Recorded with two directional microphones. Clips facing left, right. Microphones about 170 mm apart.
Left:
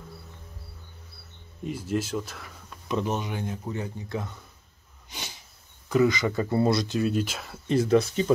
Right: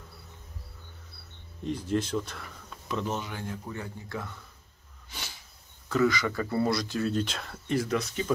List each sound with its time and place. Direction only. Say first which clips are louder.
1.6 s speech: even; 5° left (ahead or behind)
2.9 s speech: left 4 dB; 20° left (ahead or behind)
5.9 s speech: left 3 dB; 20° left (ahead or behind)
7.1 s speech: left 2 dB; 10° left (ahead or behind)
7.6 s speech: left 7 dB; 25° left (ahead or behind)